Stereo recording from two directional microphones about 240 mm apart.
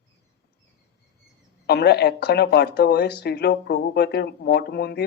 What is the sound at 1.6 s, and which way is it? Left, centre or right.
Speech, left.